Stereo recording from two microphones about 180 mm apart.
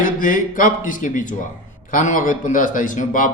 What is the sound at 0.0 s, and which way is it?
Speech, 50° left (ahead or behind).